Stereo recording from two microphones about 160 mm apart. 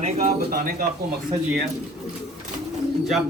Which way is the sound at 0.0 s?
55° right (ahead or behind).